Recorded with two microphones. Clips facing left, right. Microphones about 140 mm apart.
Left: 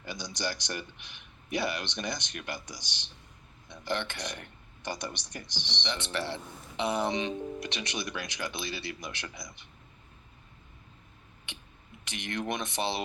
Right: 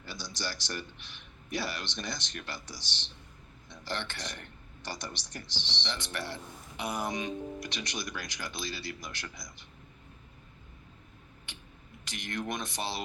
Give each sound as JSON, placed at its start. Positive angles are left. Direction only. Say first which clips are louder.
{"t": 0.0, "sound": "speech", "louder": "left 4 dB", "side_deg": 15}
{"t": 6.9, "sound": "speech", "louder": "left 3 dB", "side_deg": 70}
{"t": 8.2, "sound": "speech", "louder": "left 3 dB", "side_deg": 20}
{"t": 12.0, "sound": "speech", "louder": "left 2 dB", "side_deg": 20}